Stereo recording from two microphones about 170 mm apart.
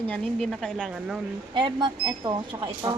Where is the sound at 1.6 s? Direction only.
25° right (ahead or behind).